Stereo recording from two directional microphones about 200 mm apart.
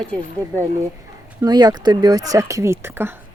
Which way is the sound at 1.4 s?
20° right (ahead or behind).